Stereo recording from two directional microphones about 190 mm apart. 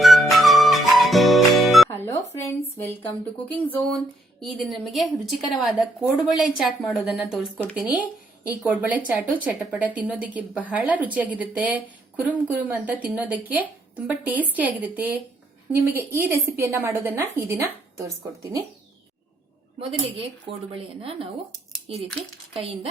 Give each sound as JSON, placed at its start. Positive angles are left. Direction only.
{"t": 0.0, "sound": "music", "side_deg": 0}
{"t": 1.9, "sound": "music", "side_deg": 10}
{"t": 2.4, "sound": "speech", "side_deg": 10}
{"t": 4.4, "sound": "a woman's voice", "side_deg": 0}
{"t": 8.4, "sound": "a woman's voice", "side_deg": -10}
{"t": 20.5, "sound": "speech", "side_deg": -30}
{"t": 21.9, "sound": "a woman's voice", "side_deg": 0}